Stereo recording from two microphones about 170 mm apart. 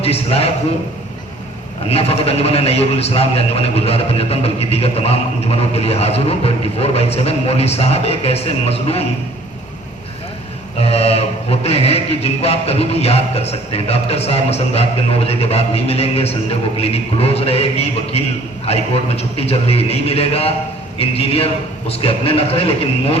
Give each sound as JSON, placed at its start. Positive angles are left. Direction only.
{"t": 0.0, "sound": "speech", "side_deg": 35}
{"t": 1.9, "sound": "speech", "side_deg": 35}
{"t": 10.8, "sound": "speech", "side_deg": 35}